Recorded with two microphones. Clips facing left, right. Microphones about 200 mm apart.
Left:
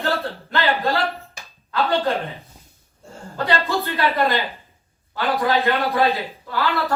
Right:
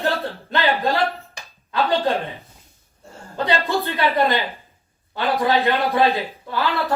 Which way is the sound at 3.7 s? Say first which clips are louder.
Right 1 dB; 20° right (ahead or behind).